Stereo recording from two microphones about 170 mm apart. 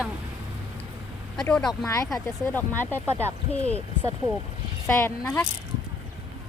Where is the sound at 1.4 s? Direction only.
5° left (ahead or behind).